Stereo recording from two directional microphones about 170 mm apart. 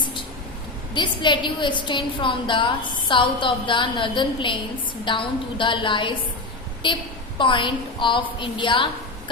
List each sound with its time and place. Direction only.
0.9 s a woman's voice: 25° left (ahead or behind)